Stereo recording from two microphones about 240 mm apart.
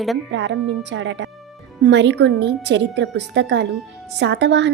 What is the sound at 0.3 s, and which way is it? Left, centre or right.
A woman's voice, right.